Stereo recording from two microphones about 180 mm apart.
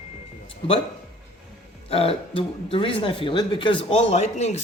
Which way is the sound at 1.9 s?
30° left (ahead or behind).